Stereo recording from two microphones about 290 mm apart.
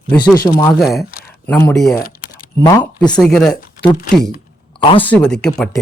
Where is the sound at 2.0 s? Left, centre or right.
Left.